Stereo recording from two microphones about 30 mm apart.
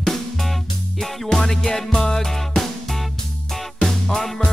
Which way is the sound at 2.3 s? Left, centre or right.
Centre.